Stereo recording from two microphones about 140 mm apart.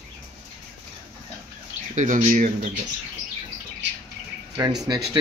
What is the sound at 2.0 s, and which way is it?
Speech, 65° right (ahead or behind).